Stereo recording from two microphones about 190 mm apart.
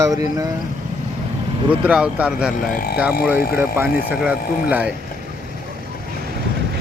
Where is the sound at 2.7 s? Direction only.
50° left (ahead or behind).